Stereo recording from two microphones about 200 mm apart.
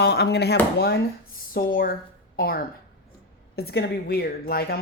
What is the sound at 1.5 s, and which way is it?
Speech, 45° left (ahead or behind).